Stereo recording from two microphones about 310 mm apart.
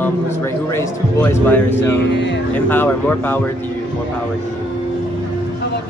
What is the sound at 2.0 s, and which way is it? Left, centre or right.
Speech, left.